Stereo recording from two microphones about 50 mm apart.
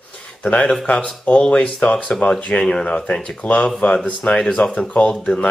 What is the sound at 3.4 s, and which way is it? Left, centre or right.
Speech, left.